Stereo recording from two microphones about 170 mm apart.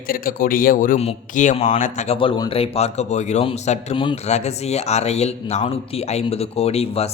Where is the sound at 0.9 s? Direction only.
45° left (ahead or behind).